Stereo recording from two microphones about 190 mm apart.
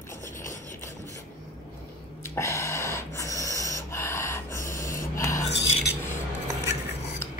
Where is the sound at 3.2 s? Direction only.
15° left (ahead or behind).